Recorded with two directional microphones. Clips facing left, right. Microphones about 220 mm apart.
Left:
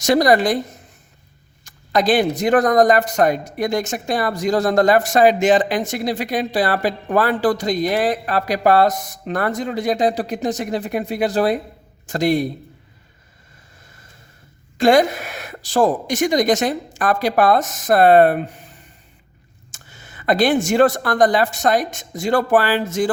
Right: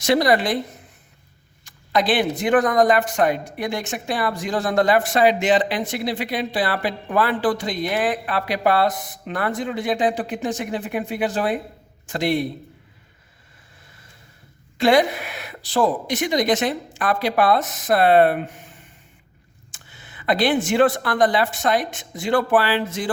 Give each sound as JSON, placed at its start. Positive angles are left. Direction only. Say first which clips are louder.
{"t": 0.0, "sound": "speech", "louder": "left 3 dB", "side_deg": 45}
{"t": 1.6, "sound": "speech", "louder": "left 3 dB", "side_deg": 45}
{"t": 14.8, "sound": "speech", "louder": "left 3 dB", "side_deg": 45}